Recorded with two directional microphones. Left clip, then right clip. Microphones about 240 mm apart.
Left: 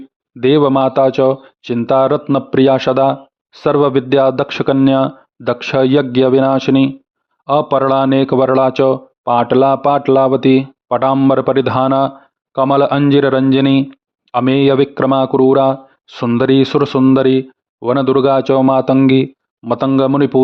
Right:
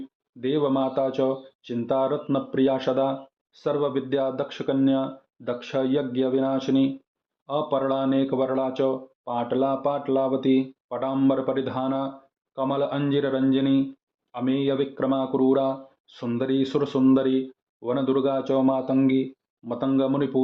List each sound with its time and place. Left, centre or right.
0.3 s speech: left